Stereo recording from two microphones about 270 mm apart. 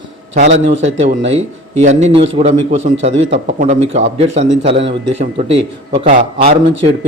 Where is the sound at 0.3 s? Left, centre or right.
Right.